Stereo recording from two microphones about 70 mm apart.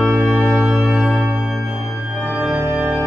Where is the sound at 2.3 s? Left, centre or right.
Centre.